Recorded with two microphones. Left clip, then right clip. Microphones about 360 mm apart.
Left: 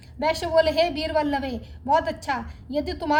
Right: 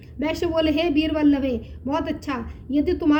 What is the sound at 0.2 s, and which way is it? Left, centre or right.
A woman's voice, left.